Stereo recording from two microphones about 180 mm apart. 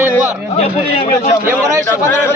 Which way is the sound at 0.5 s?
35° left (ahead or behind).